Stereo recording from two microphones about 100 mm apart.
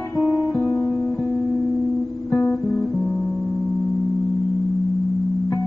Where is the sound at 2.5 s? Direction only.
15° left (ahead or behind).